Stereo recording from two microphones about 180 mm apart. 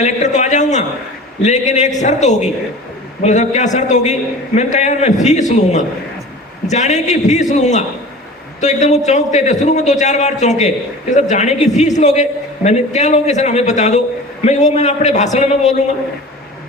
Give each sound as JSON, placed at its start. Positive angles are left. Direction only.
{"t": 0.0, "sound": "a man's voice", "side_deg": 40}